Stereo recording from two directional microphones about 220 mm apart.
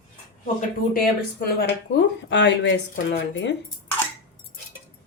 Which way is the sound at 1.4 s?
50° left (ahead or behind).